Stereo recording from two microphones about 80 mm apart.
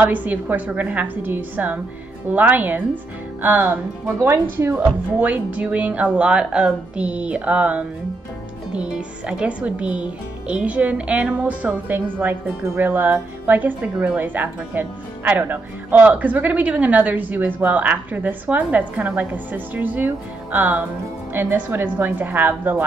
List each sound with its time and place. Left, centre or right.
0.0 s a woman's voice: right
5.2 s a woman's voice: right